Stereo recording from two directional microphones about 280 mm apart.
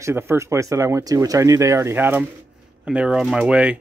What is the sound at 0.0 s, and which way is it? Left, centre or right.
A man's voice, centre.